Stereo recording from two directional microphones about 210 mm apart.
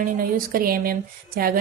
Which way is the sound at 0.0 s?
45° right (ahead or behind).